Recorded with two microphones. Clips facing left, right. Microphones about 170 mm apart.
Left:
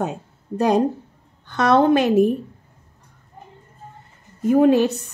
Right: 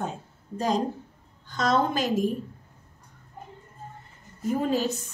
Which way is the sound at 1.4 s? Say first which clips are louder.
Left 8 dB; 65° left (ahead or behind).